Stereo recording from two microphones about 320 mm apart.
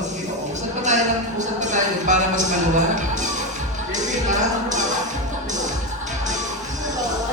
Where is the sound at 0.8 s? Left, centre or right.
Right.